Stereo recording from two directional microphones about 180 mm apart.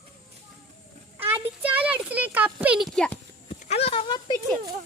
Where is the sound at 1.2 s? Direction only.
10° right (ahead or behind).